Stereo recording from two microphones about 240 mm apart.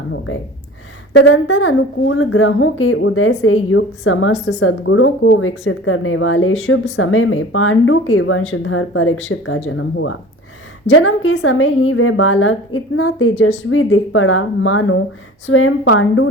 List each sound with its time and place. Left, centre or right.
1.1 s speech: left